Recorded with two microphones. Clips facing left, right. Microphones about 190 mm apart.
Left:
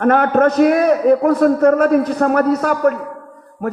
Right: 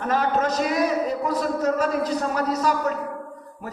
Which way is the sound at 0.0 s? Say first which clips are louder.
Left 10 dB; 60° left (ahead or behind).